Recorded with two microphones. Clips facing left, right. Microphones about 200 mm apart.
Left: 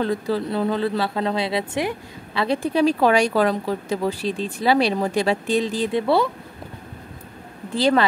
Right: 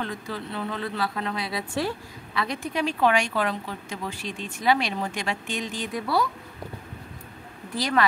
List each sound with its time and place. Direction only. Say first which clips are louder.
0.0 s speech: left 10 dB; 35° left (ahead or behind); by 2.0 s 20° left (ahead or behind)
2.3 s speech: left 8 dB; 30° left (ahead or behind)
7.7 s speech: left 7 dB; 30° left (ahead or behind)